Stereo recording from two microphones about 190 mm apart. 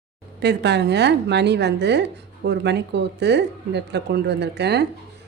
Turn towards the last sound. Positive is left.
turn(degrees=-60)  # may be behind; listen again after turning